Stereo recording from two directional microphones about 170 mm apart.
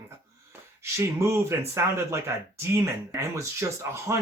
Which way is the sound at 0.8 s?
15° right (ahead or behind).